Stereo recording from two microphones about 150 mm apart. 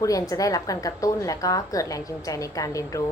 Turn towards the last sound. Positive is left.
turn(degrees=20)  # may be behind; listen again after turning